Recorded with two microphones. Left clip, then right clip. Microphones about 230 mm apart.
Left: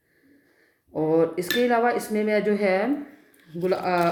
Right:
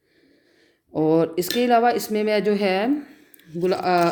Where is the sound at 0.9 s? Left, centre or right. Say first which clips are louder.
Right 2 dB; right.